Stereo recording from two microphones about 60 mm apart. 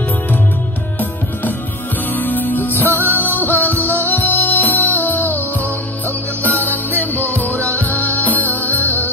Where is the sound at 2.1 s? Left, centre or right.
Left.